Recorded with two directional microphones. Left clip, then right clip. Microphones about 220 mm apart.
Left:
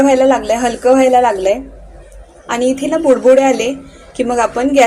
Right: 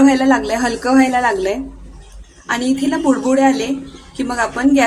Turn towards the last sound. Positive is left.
turn(degrees=5)  # may be behind; listen again after turning